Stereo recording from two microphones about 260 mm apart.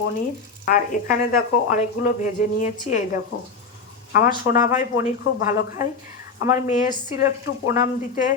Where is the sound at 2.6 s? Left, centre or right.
Left.